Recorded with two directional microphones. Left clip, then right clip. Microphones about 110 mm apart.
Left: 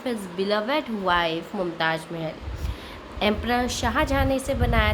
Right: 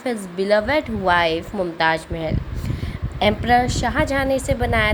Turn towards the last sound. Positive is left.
turn(degrees=-45)  # may be behind; listen again after turning